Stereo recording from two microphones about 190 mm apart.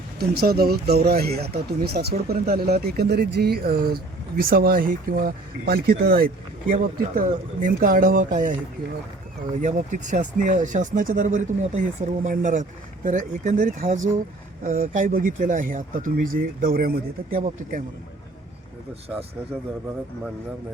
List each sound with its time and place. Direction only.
0.2 s speech: 55° right (ahead or behind)
9.6 s speech: 40° right (ahead or behind)